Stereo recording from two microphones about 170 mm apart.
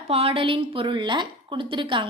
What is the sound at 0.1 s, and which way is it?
A woman's voice, 35° right (ahead or behind).